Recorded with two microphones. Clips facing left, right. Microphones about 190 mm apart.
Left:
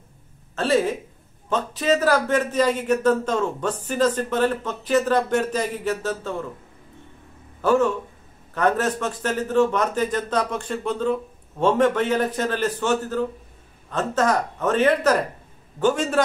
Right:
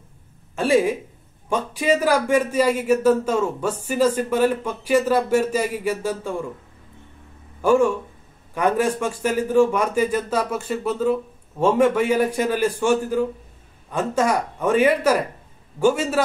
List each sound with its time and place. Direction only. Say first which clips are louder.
0.6 s a man's voice: right 2 dB; 10° right (ahead or behind)
7.6 s a man's voice: right 2 dB; 10° right (ahead or behind)